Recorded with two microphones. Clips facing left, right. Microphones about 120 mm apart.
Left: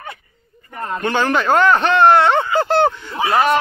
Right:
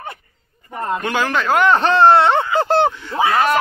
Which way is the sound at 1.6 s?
25° right (ahead or behind).